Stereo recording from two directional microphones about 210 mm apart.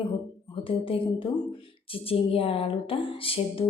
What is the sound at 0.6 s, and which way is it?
Speech, 25° left (ahead or behind).